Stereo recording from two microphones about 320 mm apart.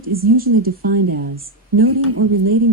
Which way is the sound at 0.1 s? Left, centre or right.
Right.